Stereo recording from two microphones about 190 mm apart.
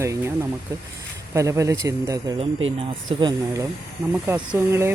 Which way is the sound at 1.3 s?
15° right (ahead or behind).